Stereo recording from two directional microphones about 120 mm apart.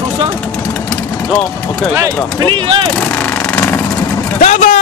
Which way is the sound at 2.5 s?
45° right (ahead or behind).